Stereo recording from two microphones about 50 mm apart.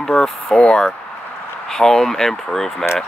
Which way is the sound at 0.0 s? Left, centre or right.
Centre.